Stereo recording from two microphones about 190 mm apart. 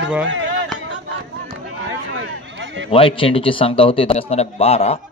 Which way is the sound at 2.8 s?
30° left (ahead or behind).